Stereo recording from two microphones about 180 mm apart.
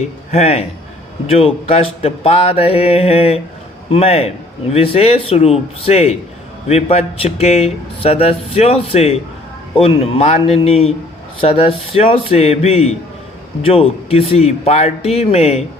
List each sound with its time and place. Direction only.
0.3 s speech: 35° left (ahead or behind)